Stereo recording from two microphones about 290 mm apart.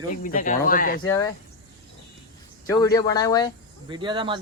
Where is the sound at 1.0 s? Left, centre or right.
Centre.